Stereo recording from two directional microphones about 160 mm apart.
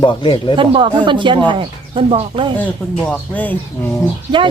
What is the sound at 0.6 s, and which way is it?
Speech, 30° right (ahead or behind).